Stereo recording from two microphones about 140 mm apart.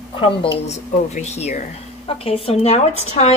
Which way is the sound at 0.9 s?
60° left (ahead or behind).